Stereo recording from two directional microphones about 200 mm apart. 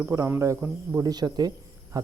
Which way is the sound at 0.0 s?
15° right (ahead or behind).